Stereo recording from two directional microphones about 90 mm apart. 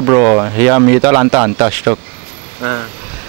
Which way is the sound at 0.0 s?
25° right (ahead or behind).